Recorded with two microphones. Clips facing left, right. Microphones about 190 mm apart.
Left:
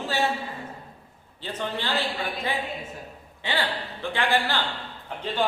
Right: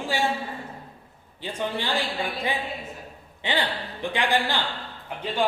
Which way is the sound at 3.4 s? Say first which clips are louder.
Right 1 dB; 15° right (ahead or behind).